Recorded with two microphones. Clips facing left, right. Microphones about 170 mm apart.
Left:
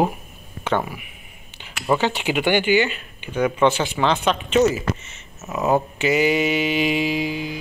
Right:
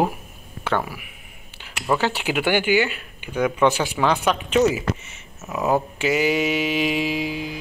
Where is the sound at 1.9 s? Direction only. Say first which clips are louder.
Left 2 dB; 20° left (ahead or behind).